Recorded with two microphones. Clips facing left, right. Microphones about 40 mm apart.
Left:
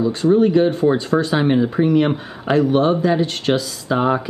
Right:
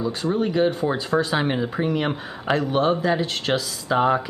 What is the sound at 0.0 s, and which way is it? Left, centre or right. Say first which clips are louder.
Speech: left 8 dB; centre.